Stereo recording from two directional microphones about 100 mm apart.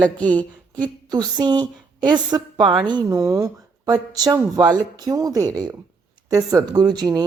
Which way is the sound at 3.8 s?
40° right (ahead or behind).